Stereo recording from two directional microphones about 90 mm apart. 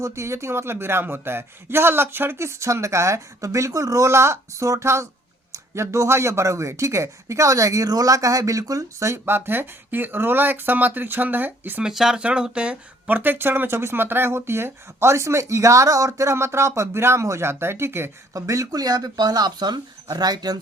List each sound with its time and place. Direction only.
0.0 s speech: 30° right (ahead or behind)
11.8 s speech: 5° right (ahead or behind); by 20.6 s 45° right (ahead or behind)